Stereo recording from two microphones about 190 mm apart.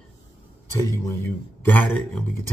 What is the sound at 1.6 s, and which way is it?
Speech, 10° left (ahead or behind).